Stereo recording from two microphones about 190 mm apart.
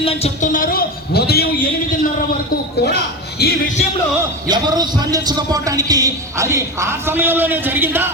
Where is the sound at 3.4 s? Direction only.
55° left (ahead or behind).